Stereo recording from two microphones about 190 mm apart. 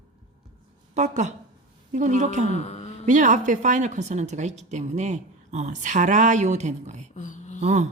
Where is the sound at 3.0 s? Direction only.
40° right (ahead or behind).